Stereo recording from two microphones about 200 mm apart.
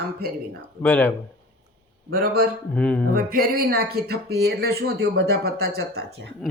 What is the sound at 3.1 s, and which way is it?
Speech, 45° right (ahead or behind).